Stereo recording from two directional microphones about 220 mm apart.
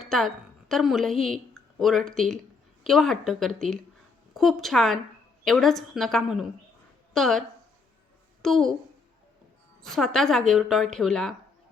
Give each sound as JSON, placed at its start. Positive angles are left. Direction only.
{"t": 0.0, "sound": "a woman's voice", "side_deg": 0}
{"t": 9.8, "sound": "speech", "side_deg": 0}